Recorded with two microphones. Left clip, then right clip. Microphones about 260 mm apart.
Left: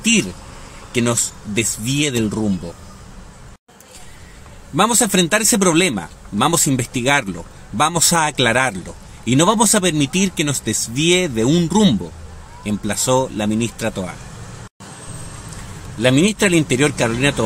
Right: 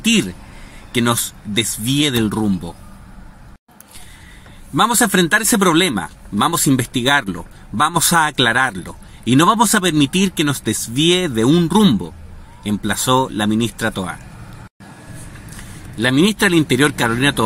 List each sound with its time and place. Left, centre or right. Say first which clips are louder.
0.9 s a man's voice: right 1 dB; centre
4.7 s a man's voice: right 1 dB; centre
16.0 s a man's voice: even; centre